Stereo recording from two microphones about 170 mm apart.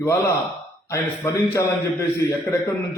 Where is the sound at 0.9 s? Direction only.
15° left (ahead or behind).